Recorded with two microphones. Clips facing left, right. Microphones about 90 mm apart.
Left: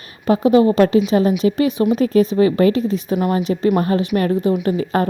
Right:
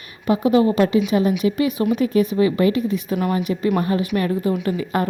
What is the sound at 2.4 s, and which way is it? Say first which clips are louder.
A woman's voice: left 3 dB; 40° left (ahead or behind).